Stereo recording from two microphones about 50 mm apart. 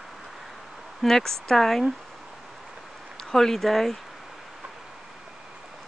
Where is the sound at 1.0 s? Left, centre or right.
Centre.